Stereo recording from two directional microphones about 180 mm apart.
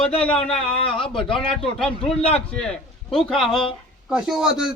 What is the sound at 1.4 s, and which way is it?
Speech, 5° left (ahead or behind).